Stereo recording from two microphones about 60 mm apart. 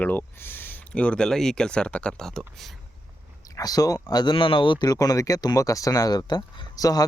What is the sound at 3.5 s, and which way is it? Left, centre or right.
Speech, left.